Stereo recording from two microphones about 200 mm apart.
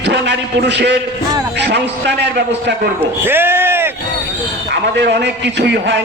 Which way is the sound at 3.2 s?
10° right (ahead or behind).